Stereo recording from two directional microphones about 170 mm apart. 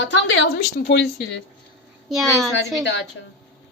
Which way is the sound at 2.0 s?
Centre (ahead or behind).